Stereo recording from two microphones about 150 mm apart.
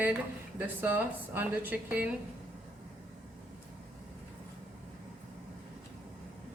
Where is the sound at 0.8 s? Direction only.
10° right (ahead or behind).